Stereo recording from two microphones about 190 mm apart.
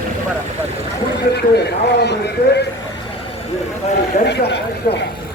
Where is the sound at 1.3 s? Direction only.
60° left (ahead or behind).